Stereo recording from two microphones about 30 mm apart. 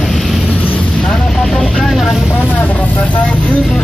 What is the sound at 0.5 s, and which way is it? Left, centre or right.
Vehicle, left.